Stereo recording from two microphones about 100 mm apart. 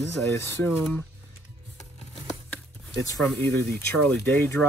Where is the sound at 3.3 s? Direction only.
20° left (ahead or behind).